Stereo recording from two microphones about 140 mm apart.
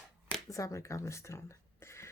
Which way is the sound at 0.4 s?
25° left (ahead or behind).